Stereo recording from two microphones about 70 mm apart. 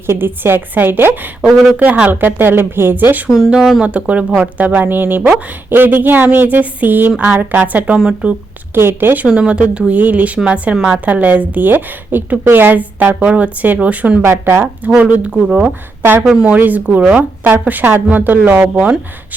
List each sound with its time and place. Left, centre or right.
0.1 s a woman's voice: right
1.5 s speech: centre
1.7 s a woman's voice: right
3.5 s a woman's voice: centre
8.7 s a woman's voice: right
9.2 s a woman's voice: centre
14.3 s a woman's voice: right
14.8 s a woman's voice: centre